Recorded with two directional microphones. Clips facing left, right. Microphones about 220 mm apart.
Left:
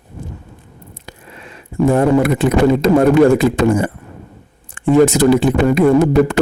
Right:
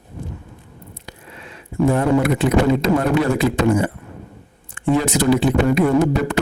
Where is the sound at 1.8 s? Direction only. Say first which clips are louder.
Left 4 dB; 45° left (ahead or behind).